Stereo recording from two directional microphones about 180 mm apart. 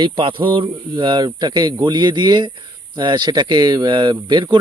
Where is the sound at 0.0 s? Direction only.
30° right (ahead or behind).